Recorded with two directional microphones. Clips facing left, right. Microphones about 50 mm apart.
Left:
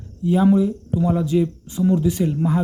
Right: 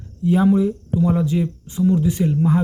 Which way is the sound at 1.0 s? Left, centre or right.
Right.